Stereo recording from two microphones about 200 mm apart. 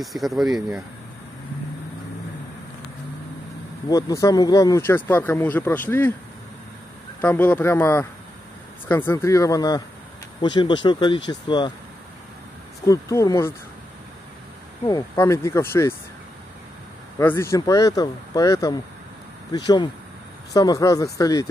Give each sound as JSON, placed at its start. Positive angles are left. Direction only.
{"t": 0.0, "sound": "speech", "side_deg": 0}
{"t": 3.9, "sound": "speech", "side_deg": 15}
{"t": 7.2, "sound": "speech", "side_deg": 10}
{"t": 12.8, "sound": "speech", "side_deg": 15}
{"t": 14.9, "sound": "speech", "side_deg": 15}
{"t": 17.2, "sound": "speech", "side_deg": 10}